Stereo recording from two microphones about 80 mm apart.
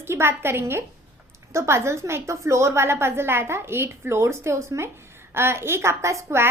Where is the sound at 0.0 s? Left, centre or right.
Right.